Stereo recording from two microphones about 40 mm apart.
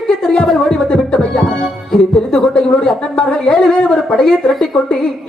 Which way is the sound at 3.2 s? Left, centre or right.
Left.